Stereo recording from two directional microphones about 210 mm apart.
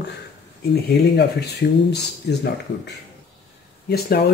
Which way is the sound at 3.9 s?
50° left (ahead or behind).